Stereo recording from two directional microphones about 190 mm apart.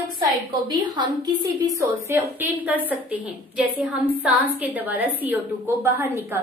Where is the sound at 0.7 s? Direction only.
25° right (ahead or behind).